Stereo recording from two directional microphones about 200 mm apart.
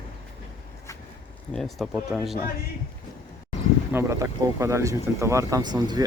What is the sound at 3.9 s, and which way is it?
Speech, 15° right (ahead or behind).